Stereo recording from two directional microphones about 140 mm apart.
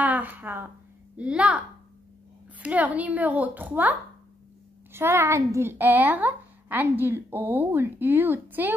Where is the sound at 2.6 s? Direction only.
10° right (ahead or behind).